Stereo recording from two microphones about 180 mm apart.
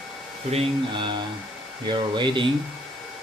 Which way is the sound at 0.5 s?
25° right (ahead or behind).